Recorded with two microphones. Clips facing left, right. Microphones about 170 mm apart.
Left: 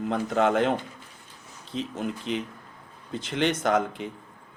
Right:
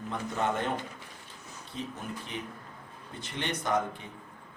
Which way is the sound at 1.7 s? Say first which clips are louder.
Left 7 dB; 90° left.